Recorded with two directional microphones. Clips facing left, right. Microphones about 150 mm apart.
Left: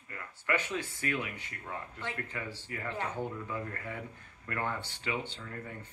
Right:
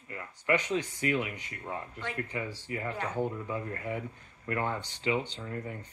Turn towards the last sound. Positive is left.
turn(degrees=-20)  # may be behind; listen again after turning